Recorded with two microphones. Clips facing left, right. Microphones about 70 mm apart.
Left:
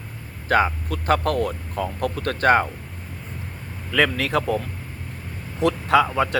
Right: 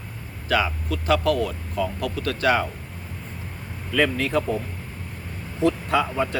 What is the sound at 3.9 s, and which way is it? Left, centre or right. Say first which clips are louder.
Speech: left 1 dB; left.